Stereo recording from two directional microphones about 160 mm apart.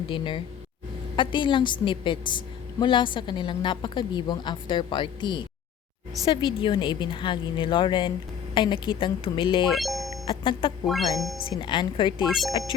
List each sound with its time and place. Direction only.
0.1 s a woman's voice: 35° left (ahead or behind)
9.7 s speech: centre (ahead or behind)
10.2 s a woman's voice: 30° left (ahead or behind)
10.8 s speech: centre (ahead or behind)
11.5 s a woman's voice: 30° left (ahead or behind)